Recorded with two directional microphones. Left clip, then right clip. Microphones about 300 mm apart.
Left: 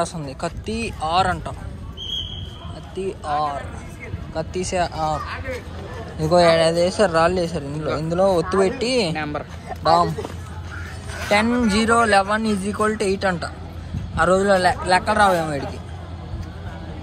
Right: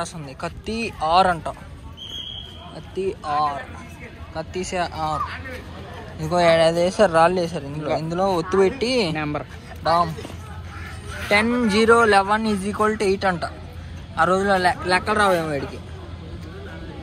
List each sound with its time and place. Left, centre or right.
0.0 s a man's voice: centre
3.0 s a man's voice: centre
8.4 s speech: left
8.7 s speech: centre
9.1 s speech: centre
11.2 s speech: centre